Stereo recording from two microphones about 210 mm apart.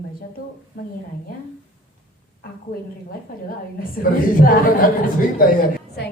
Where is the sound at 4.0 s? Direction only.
40° left (ahead or behind).